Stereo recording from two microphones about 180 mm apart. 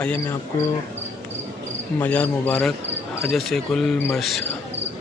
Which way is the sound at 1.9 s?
10° left (ahead or behind).